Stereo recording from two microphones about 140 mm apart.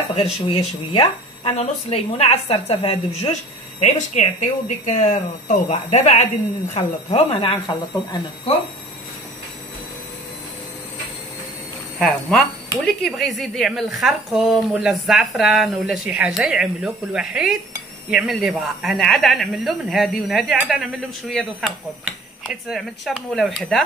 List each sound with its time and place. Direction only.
0.1 s speech: 45° left (ahead or behind)
12.0 s speech: 5° left (ahead or behind)